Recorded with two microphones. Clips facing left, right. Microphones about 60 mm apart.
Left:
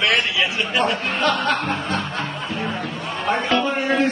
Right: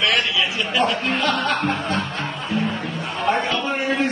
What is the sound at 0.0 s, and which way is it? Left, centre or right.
Speech, left.